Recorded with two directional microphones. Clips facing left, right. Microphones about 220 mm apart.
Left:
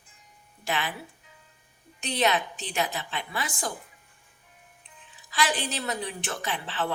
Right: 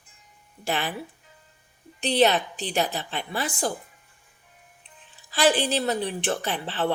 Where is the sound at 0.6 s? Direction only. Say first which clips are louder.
Right 3 dB; 35° right (ahead or behind).